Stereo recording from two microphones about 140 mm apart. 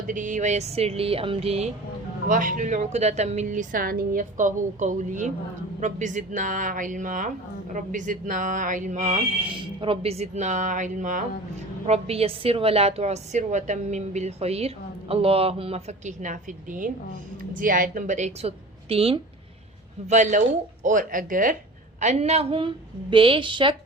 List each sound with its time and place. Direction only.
0.1 s a woman's voice: 65° right (ahead or behind); by 1.7 s 45° right (ahead or behind)
2.3 s speech: 70° right (ahead or behind)
9.6 s speech: 40° right (ahead or behind); by 11.2 s 65° right (ahead or behind)
11.9 s a woman's voice: 45° right (ahead or behind)
20.1 s speech: 60° right (ahead or behind)
20.8 s speech: 75° right (ahead or behind)
22.0 s a woman's voice: 55° right (ahead or behind); by 23.7 s 35° right (ahead or behind)